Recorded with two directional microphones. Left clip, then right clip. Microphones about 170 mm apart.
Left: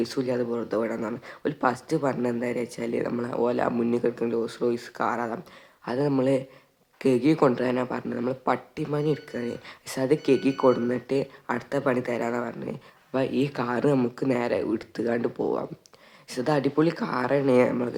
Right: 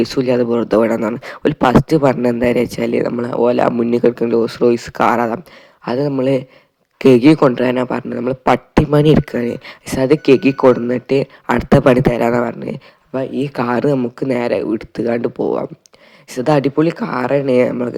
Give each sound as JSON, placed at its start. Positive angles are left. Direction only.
{"t": 0.0, "sound": "speech", "side_deg": -35}
{"t": 7.0, "sound": "speech", "side_deg": -40}
{"t": 8.4, "sound": "speech", "side_deg": -45}
{"t": 13.1, "sound": "speech", "side_deg": -20}
{"t": 13.5, "sound": "speech", "side_deg": -35}